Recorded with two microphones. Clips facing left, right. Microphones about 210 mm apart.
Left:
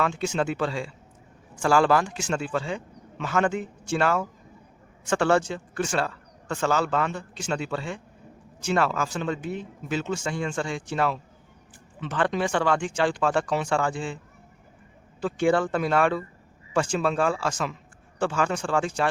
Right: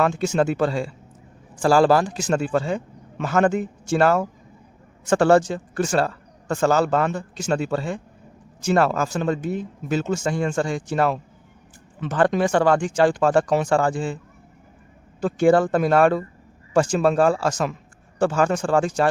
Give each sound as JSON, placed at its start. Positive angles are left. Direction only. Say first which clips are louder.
{"t": 0.0, "sound": "speech", "louder": "right 5 dB", "side_deg": -45}
{"t": 15.2, "sound": "speech", "louder": "right 6 dB", "side_deg": -40}